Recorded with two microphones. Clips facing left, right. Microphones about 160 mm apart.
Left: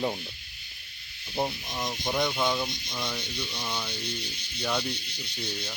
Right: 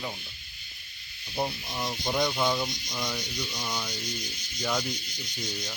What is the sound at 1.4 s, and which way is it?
Speech, centre (ahead or behind).